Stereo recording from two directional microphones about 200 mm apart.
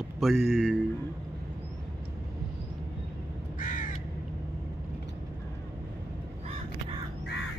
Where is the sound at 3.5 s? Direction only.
40° left (ahead or behind).